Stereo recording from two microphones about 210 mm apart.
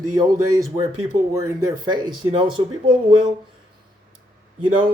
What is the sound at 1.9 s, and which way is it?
Speech, 20° right (ahead or behind).